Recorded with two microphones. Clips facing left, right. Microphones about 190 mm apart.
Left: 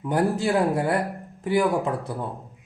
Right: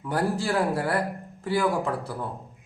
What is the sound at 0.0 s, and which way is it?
Speech, 20° left (ahead or behind).